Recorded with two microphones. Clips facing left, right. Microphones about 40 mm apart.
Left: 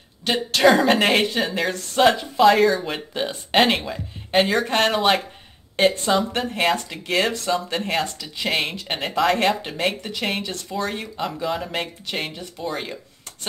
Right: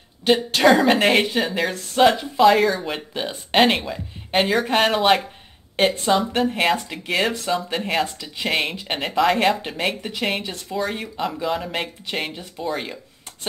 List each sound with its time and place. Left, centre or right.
0.6 s speech: centre